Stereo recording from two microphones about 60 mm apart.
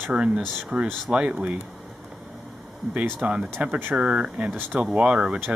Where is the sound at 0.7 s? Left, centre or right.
Centre.